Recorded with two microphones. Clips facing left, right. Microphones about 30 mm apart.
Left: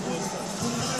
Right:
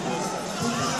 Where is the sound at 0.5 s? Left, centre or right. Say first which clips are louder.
Right 3 dB; right.